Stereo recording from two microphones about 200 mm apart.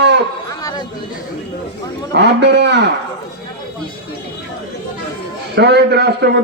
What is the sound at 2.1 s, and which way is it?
Speech, 60° right (ahead or behind).